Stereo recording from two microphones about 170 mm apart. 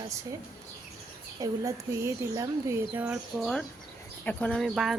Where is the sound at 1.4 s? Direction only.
15° right (ahead or behind).